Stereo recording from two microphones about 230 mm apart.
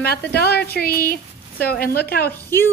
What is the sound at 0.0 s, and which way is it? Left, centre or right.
A woman's voice, left.